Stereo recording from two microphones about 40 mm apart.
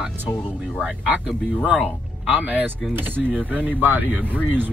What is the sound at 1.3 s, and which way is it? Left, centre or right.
Speech, right.